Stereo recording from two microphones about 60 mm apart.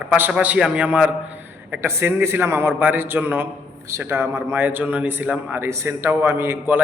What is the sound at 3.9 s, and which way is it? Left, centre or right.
A man's voice, right.